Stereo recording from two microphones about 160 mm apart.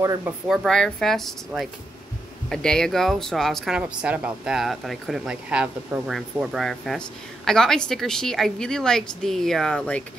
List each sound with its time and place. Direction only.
0.0 s speech: 20° right (ahead or behind)
0.5 s speech: 5° left (ahead or behind)